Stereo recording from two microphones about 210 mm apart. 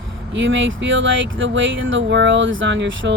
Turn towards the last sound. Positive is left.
turn(degrees=-60)  # may be behind; listen again after turning